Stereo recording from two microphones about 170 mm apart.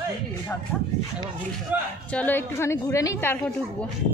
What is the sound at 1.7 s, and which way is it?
Speech, 10° right (ahead or behind).